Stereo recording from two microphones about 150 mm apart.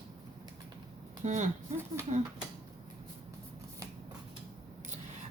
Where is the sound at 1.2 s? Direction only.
55° right (ahead or behind).